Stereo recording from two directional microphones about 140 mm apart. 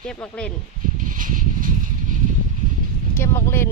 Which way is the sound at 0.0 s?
5° left (ahead or behind).